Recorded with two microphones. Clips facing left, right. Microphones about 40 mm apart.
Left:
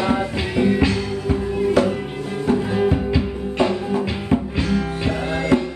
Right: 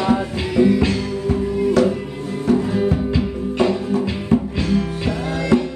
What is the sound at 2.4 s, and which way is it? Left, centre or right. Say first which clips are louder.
Music: right 1 dB; left.